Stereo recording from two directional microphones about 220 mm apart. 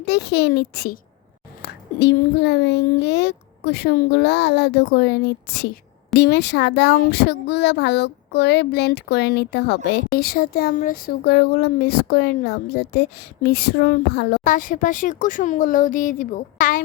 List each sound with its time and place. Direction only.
0.0 s speech: 50° left (ahead or behind)